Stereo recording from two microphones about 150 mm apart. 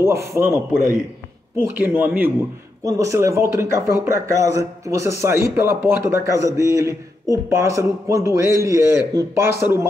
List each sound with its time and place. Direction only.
0.0 s a man's voice: 20° right (ahead or behind)
1.8 s a man's voice: 15° right (ahead or behind)